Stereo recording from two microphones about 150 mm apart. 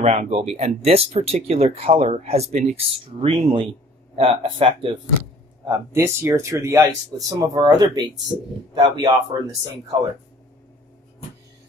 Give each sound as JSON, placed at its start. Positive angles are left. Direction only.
{"t": 0.0, "sound": "speech", "side_deg": -50}
{"t": 5.7, "sound": "speech", "side_deg": -20}